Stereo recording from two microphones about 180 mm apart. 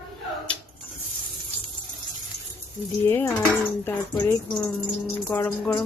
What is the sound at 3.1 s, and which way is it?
Speech, 10° left (ahead or behind).